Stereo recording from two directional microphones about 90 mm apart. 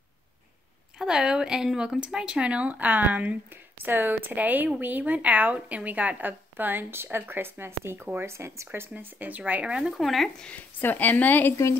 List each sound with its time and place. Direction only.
0.9 s speech: 5° right (ahead or behind)
9.9 s speech: centre (ahead or behind)
10.5 s a woman's voice: 20° left (ahead or behind)